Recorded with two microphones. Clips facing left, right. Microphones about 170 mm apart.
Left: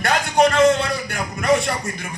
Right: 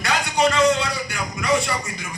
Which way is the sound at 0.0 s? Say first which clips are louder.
Left 3 dB; 55° left (ahead or behind).